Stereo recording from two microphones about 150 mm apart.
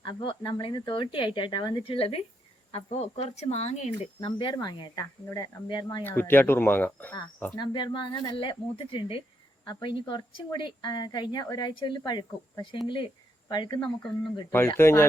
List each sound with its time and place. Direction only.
0.0 s speech: 30° left (ahead or behind)
4.3 s speech: 35° left (ahead or behind)
6.1 s speech: 15° left (ahead or behind)
7.5 s speech: 30° left (ahead or behind)
13.7 s speech: 5° left (ahead or behind)